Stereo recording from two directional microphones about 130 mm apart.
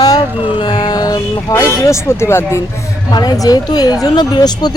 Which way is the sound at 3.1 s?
30° left (ahead or behind).